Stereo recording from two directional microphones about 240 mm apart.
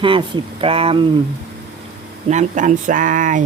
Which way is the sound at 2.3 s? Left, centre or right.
Right.